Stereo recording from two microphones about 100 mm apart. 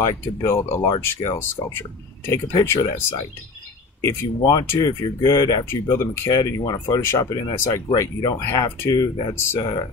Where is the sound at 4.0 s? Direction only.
30° left (ahead or behind).